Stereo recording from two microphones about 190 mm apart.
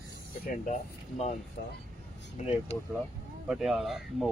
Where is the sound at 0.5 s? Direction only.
40° left (ahead or behind).